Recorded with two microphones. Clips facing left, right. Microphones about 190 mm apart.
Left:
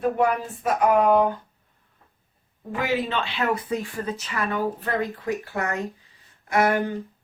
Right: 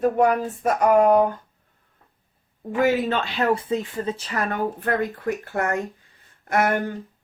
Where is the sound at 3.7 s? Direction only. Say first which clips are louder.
Right 3 dB; 25° right (ahead or behind); by 5.7 s 50° right (ahead or behind).